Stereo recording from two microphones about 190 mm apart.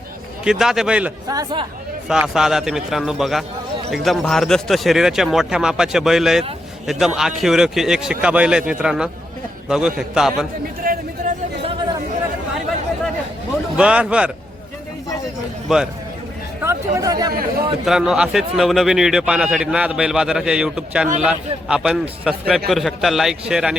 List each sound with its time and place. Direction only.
0.4 s a man's voice: 5° right (ahead or behind)
1.3 s speech: 20° right (ahead or behind)
2.0 s a man's voice: 5° right (ahead or behind)
13.7 s a man's voice: 5° right (ahead or behind)
15.7 s a man's voice: 5° right (ahead or behind)
16.6 s speech: 15° right (ahead or behind)
17.8 s a man's voice: centre (ahead or behind)